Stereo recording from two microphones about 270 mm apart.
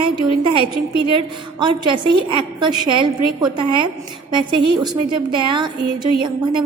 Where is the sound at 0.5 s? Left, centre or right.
Centre.